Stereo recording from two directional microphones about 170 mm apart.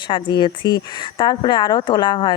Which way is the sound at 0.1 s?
25° left (ahead or behind).